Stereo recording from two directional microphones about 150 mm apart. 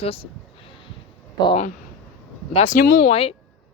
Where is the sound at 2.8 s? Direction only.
80° left.